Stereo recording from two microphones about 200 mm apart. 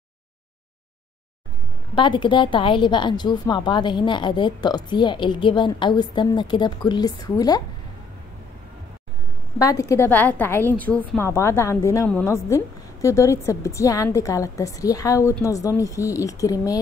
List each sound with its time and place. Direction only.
2.0 s a woman's voice: 25° left (ahead or behind)
9.6 s a woman's voice: 15° left (ahead or behind)